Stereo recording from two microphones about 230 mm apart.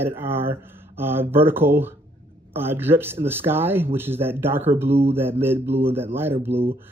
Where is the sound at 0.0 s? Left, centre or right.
Centre.